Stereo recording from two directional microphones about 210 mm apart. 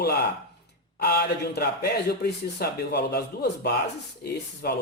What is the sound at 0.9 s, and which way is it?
Speech, 50° left (ahead or behind).